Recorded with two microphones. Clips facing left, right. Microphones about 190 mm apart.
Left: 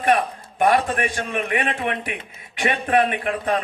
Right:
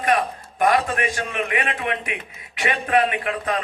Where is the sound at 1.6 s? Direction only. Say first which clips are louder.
Left 1 dB; 35° left (ahead or behind).